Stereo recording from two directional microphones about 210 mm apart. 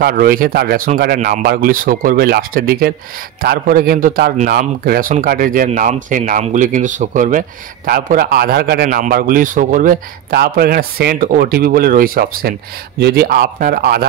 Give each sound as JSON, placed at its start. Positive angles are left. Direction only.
{"t": 0.0, "sound": "a man's voice", "side_deg": -45}